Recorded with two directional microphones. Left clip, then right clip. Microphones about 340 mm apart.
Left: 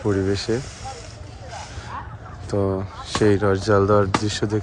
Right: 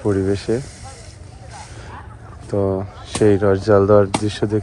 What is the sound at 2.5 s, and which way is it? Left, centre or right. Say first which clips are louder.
Speech: right 3 dB; centre.